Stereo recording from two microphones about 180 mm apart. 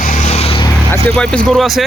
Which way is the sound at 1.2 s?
5° left (ahead or behind).